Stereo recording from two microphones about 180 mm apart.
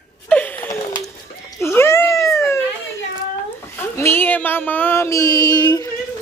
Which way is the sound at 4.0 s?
10° left (ahead or behind).